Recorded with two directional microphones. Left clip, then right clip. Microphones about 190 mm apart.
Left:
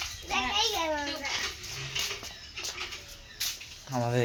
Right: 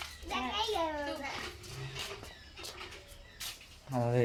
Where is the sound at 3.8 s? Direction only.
5° left (ahead or behind).